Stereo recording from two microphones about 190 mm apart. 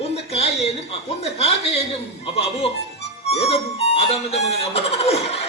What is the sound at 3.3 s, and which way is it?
Music, 35° left (ahead or behind).